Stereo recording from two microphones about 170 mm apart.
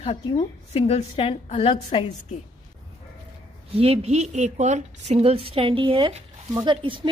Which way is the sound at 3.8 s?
35° right (ahead or behind).